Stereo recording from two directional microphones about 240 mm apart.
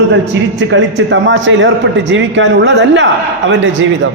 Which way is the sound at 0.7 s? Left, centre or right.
Right.